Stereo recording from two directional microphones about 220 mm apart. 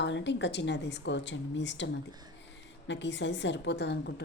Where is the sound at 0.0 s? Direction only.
55° left (ahead or behind).